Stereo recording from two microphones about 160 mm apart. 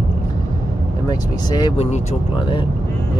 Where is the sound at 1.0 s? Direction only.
25° left (ahead or behind).